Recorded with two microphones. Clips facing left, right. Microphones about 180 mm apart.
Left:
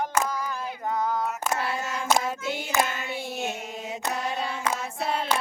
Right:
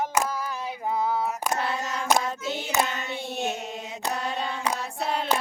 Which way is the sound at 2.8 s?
Centre (ahead or behind).